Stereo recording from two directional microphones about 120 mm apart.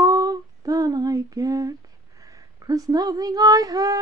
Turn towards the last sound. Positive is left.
turn(degrees=-30)  # may be behind; listen again after turning